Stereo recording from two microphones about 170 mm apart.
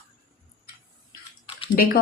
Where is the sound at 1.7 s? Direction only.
60° left (ahead or behind).